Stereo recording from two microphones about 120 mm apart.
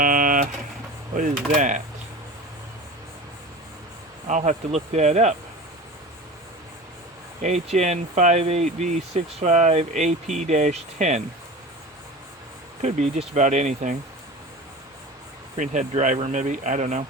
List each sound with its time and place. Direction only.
0.0 s a sound: 90° right
1.1 s speech: 90° right
4.3 s speech: 90° right; by 5.4 s 70° right (ahead or behind)
7.4 s speech: 75° right (ahead or behind)
12.8 s speech: 70° right (ahead or behind)
15.5 s speech: 90° right